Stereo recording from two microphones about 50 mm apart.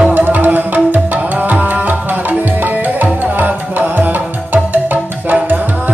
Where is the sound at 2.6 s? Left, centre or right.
Right.